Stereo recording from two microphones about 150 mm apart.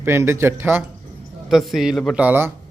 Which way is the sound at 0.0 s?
15° right (ahead or behind).